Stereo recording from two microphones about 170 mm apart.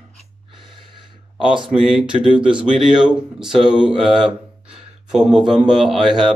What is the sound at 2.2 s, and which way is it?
Speech, 5° right (ahead or behind).